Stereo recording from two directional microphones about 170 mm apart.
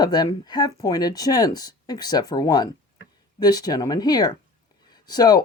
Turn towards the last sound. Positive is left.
turn(degrees=25)  # may be behind; listen again after turning